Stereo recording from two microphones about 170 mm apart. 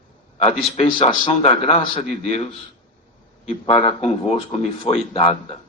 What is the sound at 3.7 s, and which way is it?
A man's voice, 35° left (ahead or behind).